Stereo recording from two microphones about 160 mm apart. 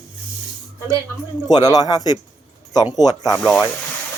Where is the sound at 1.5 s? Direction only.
25° left (ahead or behind).